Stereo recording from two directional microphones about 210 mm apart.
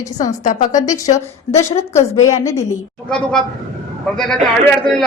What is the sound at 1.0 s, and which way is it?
Speech, 30° left (ahead or behind).